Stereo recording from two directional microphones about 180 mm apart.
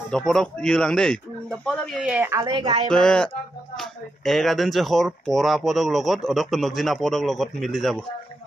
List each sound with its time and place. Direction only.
0.1 s speech: centre (ahead or behind)
2.0 s speech: 5° right (ahead or behind)
2.6 s speech: 35° right (ahead or behind)
2.9 s speech: 5° left (ahead or behind)